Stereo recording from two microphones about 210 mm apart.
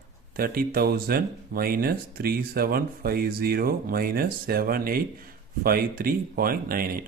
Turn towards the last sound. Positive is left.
turn(degrees=-45)  # may be behind; listen again after turning